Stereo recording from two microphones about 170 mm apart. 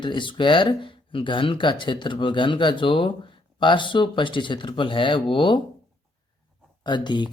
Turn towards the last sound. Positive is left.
turn(degrees=25)  # may be behind; listen again after turning